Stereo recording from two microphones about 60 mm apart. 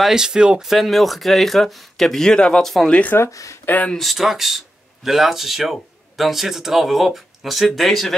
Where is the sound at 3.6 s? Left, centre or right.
Left.